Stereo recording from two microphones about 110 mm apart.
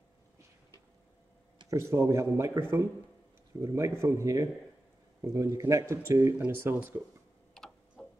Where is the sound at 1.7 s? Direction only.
25° right (ahead or behind).